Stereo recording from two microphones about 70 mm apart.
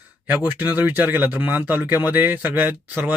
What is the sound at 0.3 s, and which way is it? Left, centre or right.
A man's voice, right.